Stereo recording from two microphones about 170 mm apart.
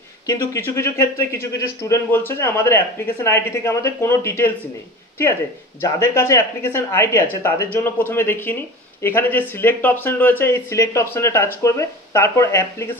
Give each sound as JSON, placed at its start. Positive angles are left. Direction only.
{"t": 0.3, "sound": "speech", "side_deg": 15}
{"t": 5.8, "sound": "speech", "side_deg": 15}